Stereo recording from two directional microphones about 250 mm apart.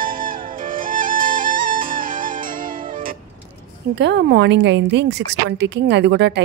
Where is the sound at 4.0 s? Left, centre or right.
Right.